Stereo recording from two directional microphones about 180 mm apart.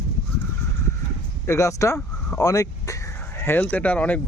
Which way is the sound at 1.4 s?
15° left (ahead or behind).